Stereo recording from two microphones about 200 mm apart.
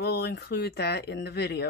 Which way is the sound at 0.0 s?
55° left (ahead or behind).